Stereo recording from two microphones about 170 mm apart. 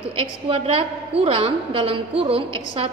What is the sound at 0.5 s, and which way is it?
A woman's voice, 30° right (ahead or behind).